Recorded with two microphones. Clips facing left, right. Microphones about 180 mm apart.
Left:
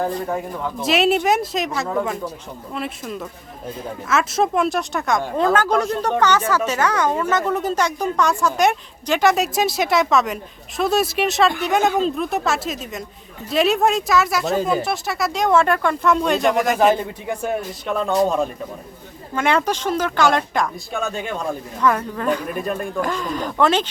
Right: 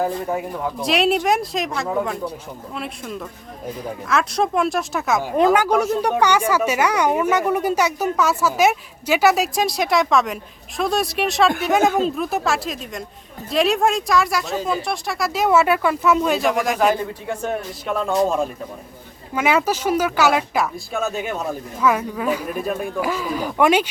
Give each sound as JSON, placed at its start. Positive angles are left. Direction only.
{"t": 0.0, "sound": "a woman's voice", "side_deg": -5}